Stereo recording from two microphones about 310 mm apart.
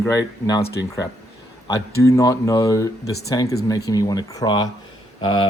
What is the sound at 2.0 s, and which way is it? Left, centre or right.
Speech, centre.